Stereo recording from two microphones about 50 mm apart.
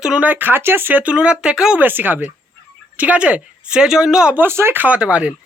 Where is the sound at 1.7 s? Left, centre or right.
Right; by 4.3 s centre.